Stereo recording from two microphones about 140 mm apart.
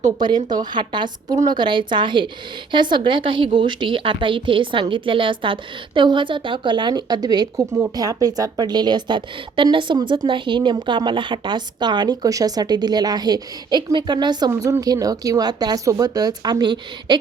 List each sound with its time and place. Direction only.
0.2 s a woman's voice: 30° right (ahead or behind)